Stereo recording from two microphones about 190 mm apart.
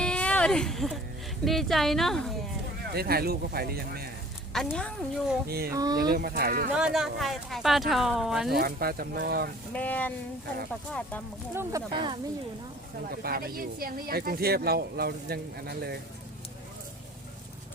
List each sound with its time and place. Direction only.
0.0 s a sound: 5° left (ahead or behind)
1.5 s speech: centre (ahead or behind)
2.9 s speech: 55° right (ahead or behind)
4.5 s speech: 5° left (ahead or behind)
5.5 s speech: 55° right (ahead or behind)
5.7 s speech: 20° right (ahead or behind)
6.1 s speech: 55° right (ahead or behind)
6.7 s speech: 5° right (ahead or behind)
8.5 s speech: 50° right (ahead or behind)
9.7 s speech: 10° left (ahead or behind)
11.7 s speech: 15° right (ahead or behind)
13.1 s speech: 50° right (ahead or behind)